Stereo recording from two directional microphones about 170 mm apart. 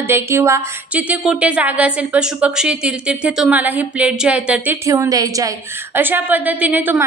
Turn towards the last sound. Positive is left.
turn(degrees=-10)  # may be behind; listen again after turning